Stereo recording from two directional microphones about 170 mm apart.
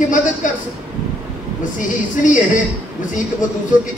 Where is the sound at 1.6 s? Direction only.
50° left (ahead or behind).